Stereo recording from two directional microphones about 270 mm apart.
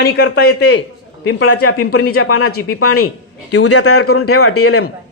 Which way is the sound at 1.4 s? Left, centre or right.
Left.